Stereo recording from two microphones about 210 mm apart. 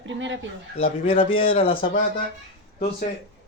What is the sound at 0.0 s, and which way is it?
Speech, 65° right (ahead or behind).